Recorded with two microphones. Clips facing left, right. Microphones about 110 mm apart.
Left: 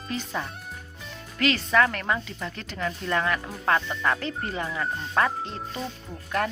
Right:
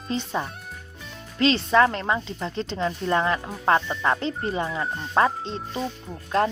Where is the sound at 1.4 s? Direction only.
25° right (ahead or behind).